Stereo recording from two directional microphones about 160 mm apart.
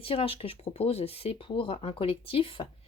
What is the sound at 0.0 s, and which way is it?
Speech, 35° left (ahead or behind).